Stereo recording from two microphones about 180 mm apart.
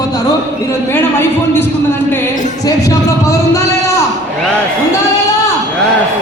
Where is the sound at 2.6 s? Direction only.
20° left (ahead or behind).